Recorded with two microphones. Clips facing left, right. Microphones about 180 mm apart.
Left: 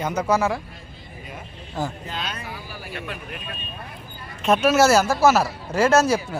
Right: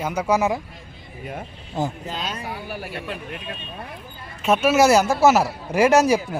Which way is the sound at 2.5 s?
60° right (ahead or behind).